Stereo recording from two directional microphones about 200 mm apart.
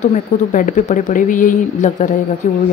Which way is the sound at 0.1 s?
40° left (ahead or behind).